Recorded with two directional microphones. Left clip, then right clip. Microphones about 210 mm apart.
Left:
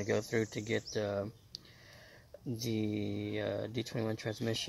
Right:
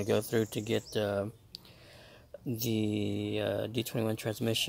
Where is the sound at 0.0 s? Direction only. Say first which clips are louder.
Right 3 dB; 10° right (ahead or behind).